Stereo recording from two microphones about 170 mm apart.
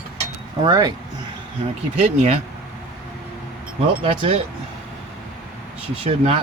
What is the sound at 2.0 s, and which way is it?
Speech, 40° right (ahead or behind).